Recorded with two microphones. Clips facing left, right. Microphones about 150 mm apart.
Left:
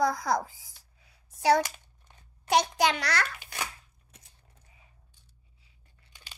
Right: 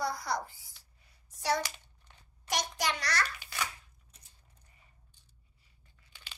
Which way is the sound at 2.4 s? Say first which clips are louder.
Left 9 dB; 75° left (ahead or behind).